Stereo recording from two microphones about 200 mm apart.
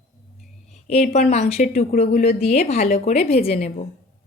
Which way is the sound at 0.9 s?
35° left (ahead or behind).